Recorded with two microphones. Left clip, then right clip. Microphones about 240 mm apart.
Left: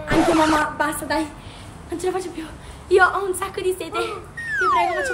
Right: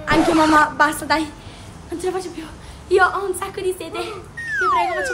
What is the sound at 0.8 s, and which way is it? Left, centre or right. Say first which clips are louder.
Speech: right 5 dB; right.